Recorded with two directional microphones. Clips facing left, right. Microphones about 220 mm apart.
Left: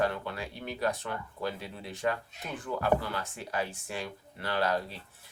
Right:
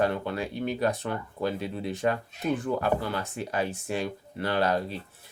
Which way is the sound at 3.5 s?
20° right (ahead or behind).